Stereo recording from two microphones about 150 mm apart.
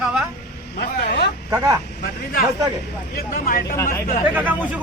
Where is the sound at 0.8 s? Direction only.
90° left.